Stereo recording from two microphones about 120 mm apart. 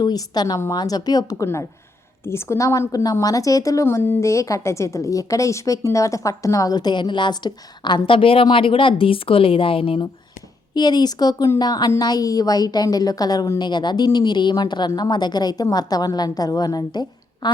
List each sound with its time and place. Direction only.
0.0 s a woman's voice: 35° left (ahead or behind)
2.2 s a woman's voice: 20° left (ahead or behind); by 10.1 s 50° left (ahead or behind)
10.8 s a woman's voice: 35° left (ahead or behind)